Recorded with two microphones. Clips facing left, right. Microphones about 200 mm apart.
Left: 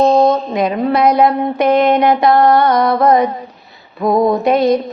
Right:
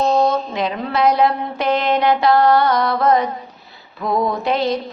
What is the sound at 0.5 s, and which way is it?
Mantra, 50° left (ahead or behind).